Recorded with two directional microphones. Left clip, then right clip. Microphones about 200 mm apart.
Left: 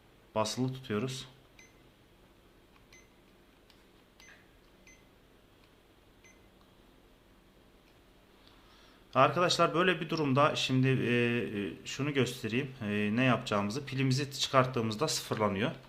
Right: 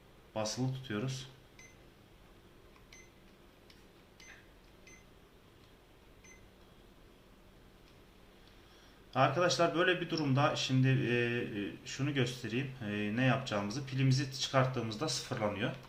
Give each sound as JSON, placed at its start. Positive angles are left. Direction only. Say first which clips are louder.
{"t": 0.3, "sound": "a man's voice", "louder": "left 5 dB", "side_deg": 55}
{"t": 9.1, "sound": "a man's voice", "louder": "left 3 dB", "side_deg": 55}